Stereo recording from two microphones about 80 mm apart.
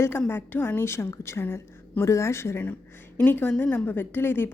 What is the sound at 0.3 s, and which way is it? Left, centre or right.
A woman's voice, left.